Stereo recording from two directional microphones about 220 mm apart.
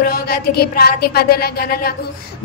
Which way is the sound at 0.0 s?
45° left (ahead or behind).